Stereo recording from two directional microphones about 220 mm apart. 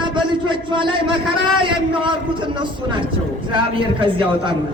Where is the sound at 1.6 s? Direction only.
20° right (ahead or behind).